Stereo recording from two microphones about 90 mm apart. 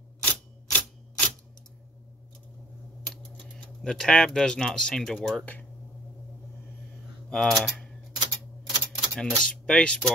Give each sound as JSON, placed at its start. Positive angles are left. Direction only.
{"t": 0.2, "sound": "a sound", "side_deg": 20}
{"t": 3.5, "sound": "speech", "side_deg": 5}
{"t": 5.4, "sound": "speech", "side_deg": 20}
{"t": 7.2, "sound": "speech", "side_deg": 5}
{"t": 8.6, "sound": "typewriter", "side_deg": 10}
{"t": 9.4, "sound": "speech", "side_deg": 10}